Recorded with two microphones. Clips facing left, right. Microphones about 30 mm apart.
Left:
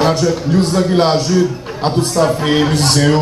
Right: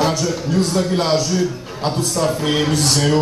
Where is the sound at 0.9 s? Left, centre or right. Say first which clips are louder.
Left 6 dB; left.